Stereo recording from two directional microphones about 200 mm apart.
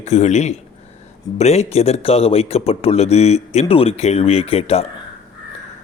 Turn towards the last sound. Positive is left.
turn(degrees=30)  # may be behind; listen again after turning